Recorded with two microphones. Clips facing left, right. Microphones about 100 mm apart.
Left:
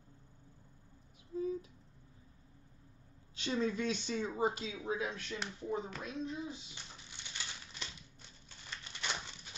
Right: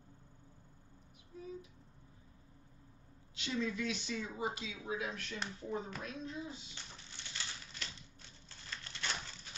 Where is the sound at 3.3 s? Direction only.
35° left (ahead or behind).